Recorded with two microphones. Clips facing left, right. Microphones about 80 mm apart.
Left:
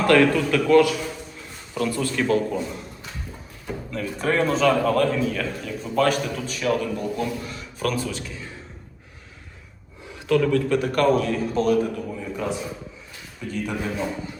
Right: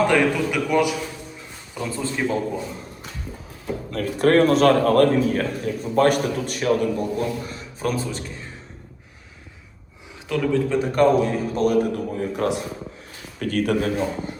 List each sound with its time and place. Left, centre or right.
0.1 s a man's voice: centre
3.9 s a man's voice: right
10.2 s a man's voice: centre
10.7 s a man's voice: right
11.6 s a man's voice: right